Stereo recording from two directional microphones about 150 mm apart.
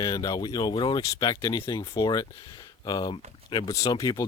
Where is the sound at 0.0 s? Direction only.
25° left (ahead or behind).